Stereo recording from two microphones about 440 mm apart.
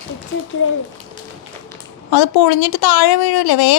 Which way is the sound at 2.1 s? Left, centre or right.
Left.